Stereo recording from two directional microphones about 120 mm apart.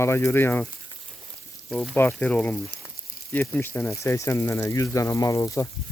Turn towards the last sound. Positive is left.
turn(degrees=25)  # may be behind; listen again after turning